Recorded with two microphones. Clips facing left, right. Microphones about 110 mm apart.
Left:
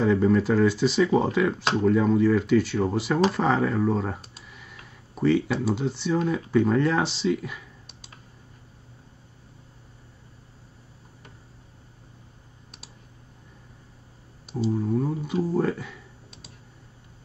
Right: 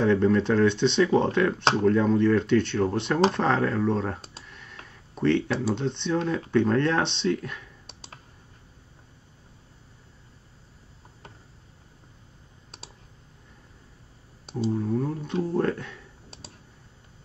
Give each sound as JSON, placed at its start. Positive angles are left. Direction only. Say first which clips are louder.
{"t": 0.0, "sound": "speech", "louder": "even", "side_deg": 5}
{"t": 4.5, "sound": "a sound", "louder": "even", "side_deg": 5}
{"t": 5.1, "sound": "speech", "louder": "left 1 dB", "side_deg": 5}
{"t": 7.8, "sound": "computer keyboard", "louder": "right 2 dB", "side_deg": -35}
{"t": 14.5, "sound": "speech", "louder": "left 1 dB", "side_deg": 5}